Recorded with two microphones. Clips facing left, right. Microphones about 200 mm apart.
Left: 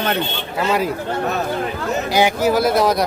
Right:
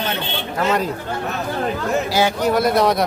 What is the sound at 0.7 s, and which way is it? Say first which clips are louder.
Speech: left 1 dB; 10° left (ahead or behind).